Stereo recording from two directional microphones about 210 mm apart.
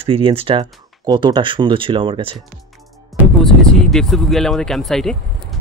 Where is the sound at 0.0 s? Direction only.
25° right (ahead or behind).